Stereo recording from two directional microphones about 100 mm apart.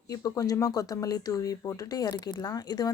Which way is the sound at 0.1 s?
35° left (ahead or behind).